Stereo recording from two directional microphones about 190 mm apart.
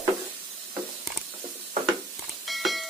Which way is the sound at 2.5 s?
Centre (ahead or behind).